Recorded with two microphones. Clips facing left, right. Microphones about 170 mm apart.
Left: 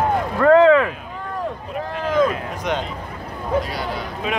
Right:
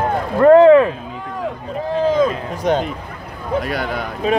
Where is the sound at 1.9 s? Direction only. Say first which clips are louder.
Right 3 dB; 30° right (ahead or behind).